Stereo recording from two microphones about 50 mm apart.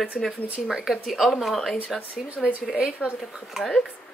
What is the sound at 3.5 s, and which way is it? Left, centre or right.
Speech, centre.